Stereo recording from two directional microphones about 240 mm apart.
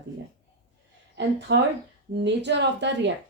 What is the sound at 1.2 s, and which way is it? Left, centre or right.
A woman's voice, right.